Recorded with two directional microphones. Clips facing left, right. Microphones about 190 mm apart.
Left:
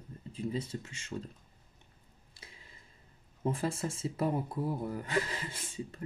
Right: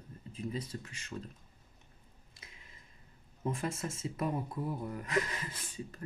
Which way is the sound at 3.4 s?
30° left (ahead or behind).